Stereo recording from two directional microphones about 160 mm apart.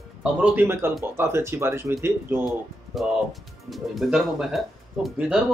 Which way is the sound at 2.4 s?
Centre (ahead or behind).